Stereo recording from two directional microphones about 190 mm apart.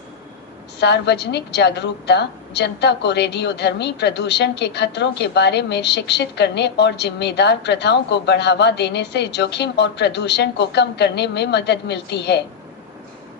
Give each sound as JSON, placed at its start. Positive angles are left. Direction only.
{"t": 0.8, "sound": "a woman's voice", "side_deg": 60}